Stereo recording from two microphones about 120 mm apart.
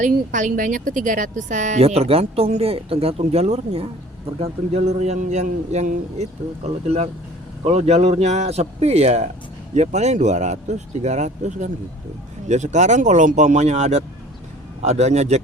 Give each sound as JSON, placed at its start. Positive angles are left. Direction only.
{"t": 0.0, "sound": "speech", "side_deg": -90}
{"t": 1.8, "sound": "speech", "side_deg": -55}
{"t": 6.8, "sound": "speech", "side_deg": -60}